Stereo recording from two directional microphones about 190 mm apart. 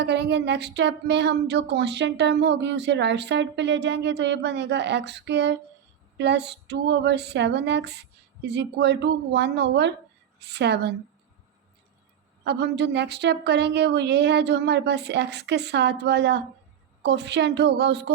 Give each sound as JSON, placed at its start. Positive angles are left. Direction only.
{"t": 0.0, "sound": "speech", "side_deg": -65}
{"t": 12.5, "sound": "speech", "side_deg": -65}